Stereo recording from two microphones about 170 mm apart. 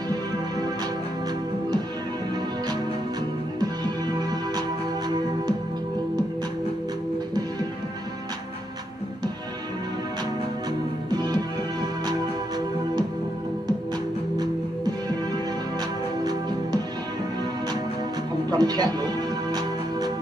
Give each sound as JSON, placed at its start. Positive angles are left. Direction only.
{"t": 3.5, "sound": "music", "side_deg": -25}
{"t": 11.1, "sound": "music", "side_deg": -25}
{"t": 18.5, "sound": "music", "side_deg": -25}